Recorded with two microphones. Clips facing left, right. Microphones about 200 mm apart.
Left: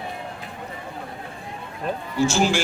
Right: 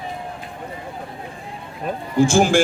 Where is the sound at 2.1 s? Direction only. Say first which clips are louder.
Right 6 dB; 50° right (ahead or behind).